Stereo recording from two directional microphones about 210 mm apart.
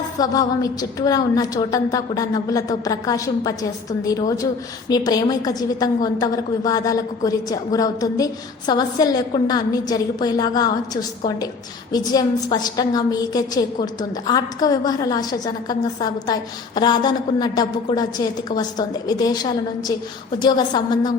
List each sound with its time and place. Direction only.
0.2 s a woman's voice: 20° left (ahead or behind)